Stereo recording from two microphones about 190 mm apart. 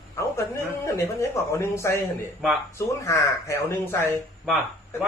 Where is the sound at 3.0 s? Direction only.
15° left (ahead or behind).